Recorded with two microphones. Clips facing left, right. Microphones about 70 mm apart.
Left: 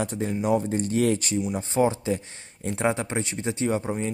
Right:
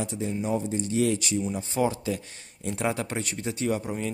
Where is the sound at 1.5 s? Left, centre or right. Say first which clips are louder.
Left 6 dB; left.